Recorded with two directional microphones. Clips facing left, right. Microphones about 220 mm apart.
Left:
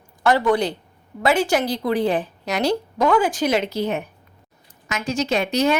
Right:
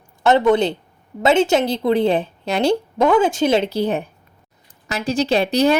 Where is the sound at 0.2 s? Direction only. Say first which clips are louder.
Right 4 dB; 25° right (ahead or behind).